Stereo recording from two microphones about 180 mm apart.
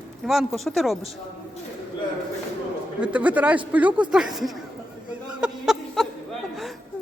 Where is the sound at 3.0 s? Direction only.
10° right (ahead or behind).